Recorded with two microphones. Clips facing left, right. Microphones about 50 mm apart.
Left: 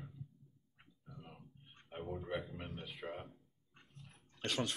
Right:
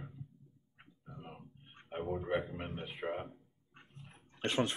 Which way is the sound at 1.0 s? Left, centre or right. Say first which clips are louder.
Right 5 dB; right.